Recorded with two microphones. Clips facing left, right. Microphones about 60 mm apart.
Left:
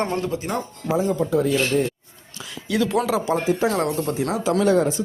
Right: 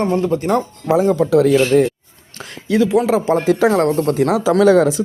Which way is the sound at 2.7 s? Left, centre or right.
Right.